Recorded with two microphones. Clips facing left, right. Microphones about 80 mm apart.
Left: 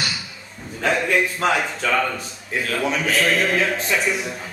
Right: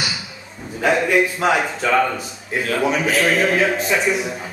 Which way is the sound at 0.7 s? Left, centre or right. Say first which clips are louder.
Right 3 dB; centre.